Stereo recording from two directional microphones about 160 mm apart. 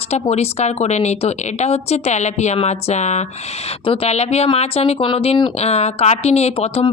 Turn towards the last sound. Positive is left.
turn(degrees=35)  # may be behind; listen again after turning